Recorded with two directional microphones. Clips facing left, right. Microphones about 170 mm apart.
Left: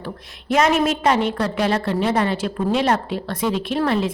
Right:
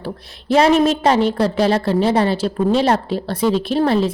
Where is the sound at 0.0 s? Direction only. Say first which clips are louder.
Right 4 dB; 30° right (ahead or behind).